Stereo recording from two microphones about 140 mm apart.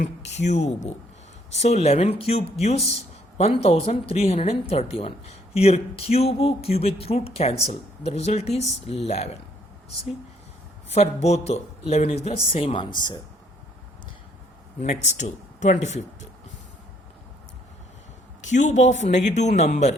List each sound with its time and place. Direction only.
0.0 s speech: 55° left (ahead or behind)
10.8 s speech: 50° left (ahead or behind); by 13.1 s 30° left (ahead or behind)
14.8 s speech: 55° left (ahead or behind)
18.4 s speech: 60° left (ahead or behind)